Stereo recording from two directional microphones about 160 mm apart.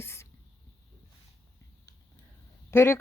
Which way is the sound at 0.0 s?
15° left (ahead or behind).